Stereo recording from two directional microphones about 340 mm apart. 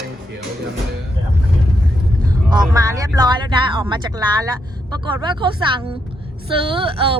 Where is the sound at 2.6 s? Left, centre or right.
Centre.